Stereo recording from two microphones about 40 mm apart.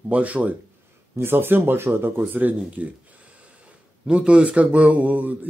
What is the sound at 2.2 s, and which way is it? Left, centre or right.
Speech, right.